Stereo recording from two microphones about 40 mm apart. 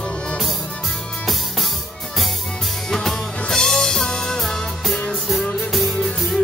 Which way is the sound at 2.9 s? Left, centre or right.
Centre.